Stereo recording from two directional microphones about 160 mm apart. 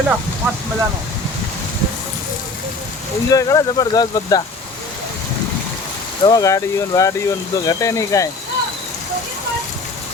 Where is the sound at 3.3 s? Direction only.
20° left (ahead or behind).